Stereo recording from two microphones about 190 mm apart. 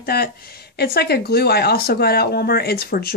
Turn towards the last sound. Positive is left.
turn(degrees=55)  # may be behind; listen again after turning